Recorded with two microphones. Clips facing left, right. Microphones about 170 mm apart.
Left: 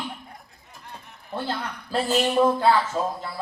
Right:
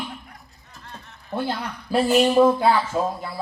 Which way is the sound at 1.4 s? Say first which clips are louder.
Right 3 dB; 10° right (ahead or behind).